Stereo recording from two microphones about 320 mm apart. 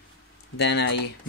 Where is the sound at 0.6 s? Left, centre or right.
Left.